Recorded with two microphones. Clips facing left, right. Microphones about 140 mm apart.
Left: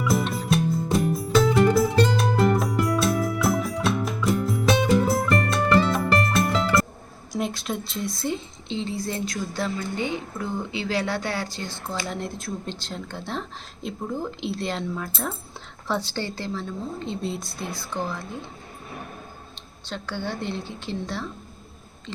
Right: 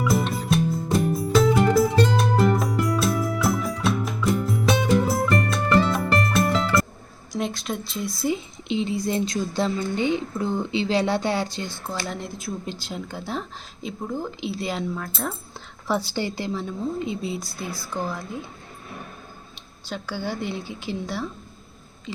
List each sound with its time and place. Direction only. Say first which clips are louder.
0.0 s music: right 1 dB; centre (ahead or behind)
7.3 s a woman's voice: even; centre (ahead or behind); by 11.9 s 15° right (ahead or behind)
12.0 s speech: even; centre (ahead or behind)
15.9 s a woman's voice: right 2 dB; 10° right (ahead or behind)
19.9 s a woman's voice: right 1 dB; 5° right (ahead or behind)